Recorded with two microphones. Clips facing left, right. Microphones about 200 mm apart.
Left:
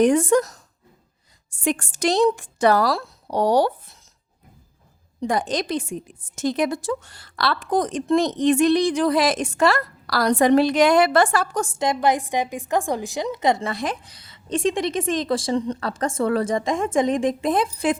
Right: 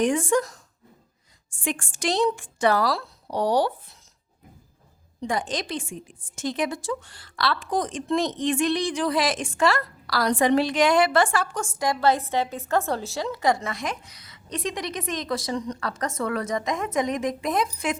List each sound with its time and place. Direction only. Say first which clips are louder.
0.0 s a woman's voice: left 5 dB; 40° left (ahead or behind)
5.3 s a woman's voice: left 5 dB; 40° left (ahead or behind)
11.8 s a woman's voice: left 1 dB; 20° left (ahead or behind)